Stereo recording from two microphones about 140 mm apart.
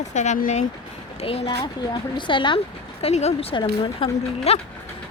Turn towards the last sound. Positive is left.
turn(degrees=45)  # may be behind; listen again after turning